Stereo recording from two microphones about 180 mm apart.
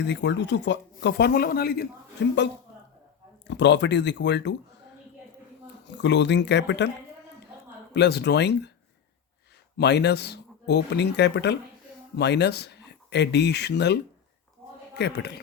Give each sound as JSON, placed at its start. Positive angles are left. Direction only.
{"t": 0.0, "sound": "speech", "side_deg": 75}
{"t": 2.2, "sound": "speech", "side_deg": 75}
{"t": 3.4, "sound": "speech", "side_deg": 75}
{"t": 5.9, "sound": "speech", "side_deg": 75}
{"t": 7.9, "sound": "speech", "side_deg": 70}
{"t": 9.7, "sound": "speech", "side_deg": 70}